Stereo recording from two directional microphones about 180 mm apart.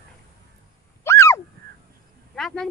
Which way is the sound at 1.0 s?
15° left (ahead or behind).